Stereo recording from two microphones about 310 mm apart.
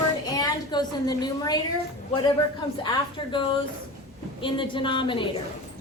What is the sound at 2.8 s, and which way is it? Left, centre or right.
A woman's voice, centre.